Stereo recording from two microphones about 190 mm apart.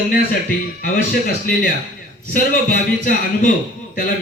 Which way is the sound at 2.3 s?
50° left (ahead or behind).